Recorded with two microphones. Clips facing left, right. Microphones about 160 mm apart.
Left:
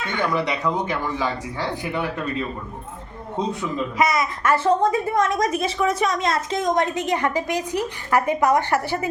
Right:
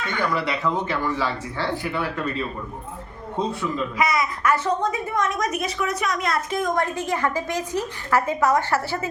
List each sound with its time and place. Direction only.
0.3 s speech: 20° left (ahead or behind)
3.5 s a woman's voice: 20° left (ahead or behind)